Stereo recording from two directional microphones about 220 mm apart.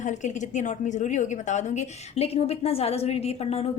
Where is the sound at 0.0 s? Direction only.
35° left (ahead or behind).